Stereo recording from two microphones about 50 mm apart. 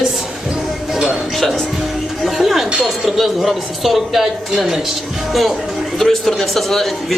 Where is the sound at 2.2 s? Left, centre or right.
Centre.